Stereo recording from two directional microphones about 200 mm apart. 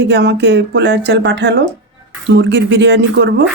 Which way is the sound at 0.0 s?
60° right (ahead or behind).